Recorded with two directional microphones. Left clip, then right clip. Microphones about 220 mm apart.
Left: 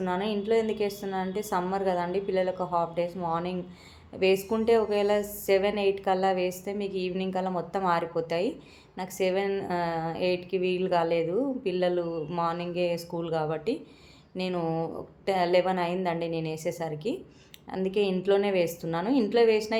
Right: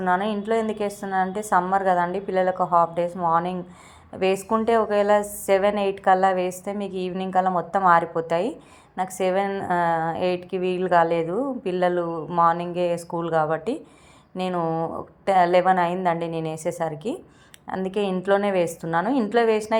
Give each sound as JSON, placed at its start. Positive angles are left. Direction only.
{"t": 0.0, "sound": "a woman's voice", "side_deg": -20}